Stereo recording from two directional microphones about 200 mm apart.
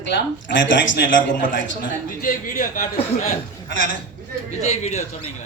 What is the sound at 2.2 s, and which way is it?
Speech, 45° left (ahead or behind).